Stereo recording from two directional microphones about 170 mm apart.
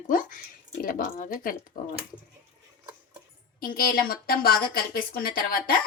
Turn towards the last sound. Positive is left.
turn(degrees=65)  # may be behind; listen again after turning